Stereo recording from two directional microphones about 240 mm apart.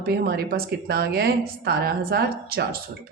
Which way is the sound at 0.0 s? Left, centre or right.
Right.